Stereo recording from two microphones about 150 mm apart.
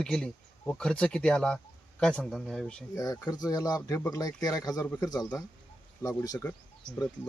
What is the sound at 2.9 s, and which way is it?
Speech, 20° left (ahead or behind).